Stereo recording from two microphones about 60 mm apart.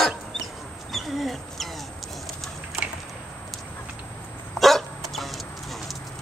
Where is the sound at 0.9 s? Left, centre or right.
Centre.